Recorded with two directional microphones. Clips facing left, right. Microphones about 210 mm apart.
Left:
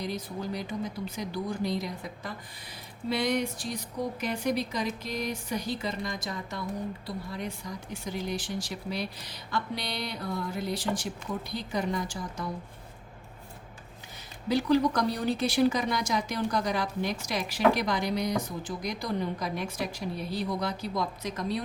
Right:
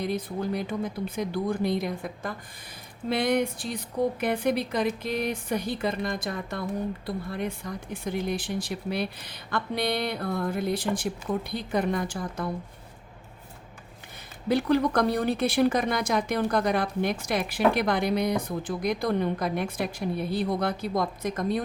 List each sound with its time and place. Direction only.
0.0 s speech: 55° right (ahead or behind)
14.4 s speech: 55° right (ahead or behind)